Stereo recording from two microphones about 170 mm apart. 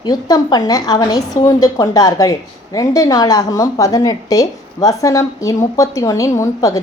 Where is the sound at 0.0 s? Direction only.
25° left (ahead or behind).